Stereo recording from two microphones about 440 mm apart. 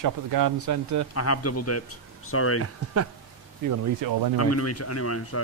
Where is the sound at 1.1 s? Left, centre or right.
Left.